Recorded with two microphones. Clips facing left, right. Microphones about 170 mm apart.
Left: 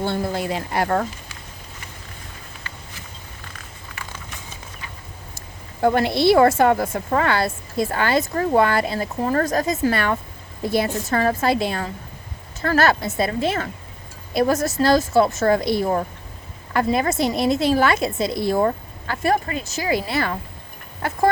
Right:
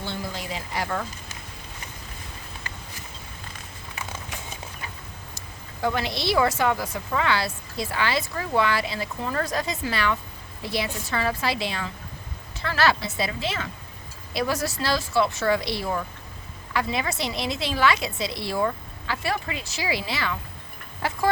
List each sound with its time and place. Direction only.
0.0 s speech: 55° left (ahead or behind)
5.8 s a woman's voice: 50° left (ahead or behind)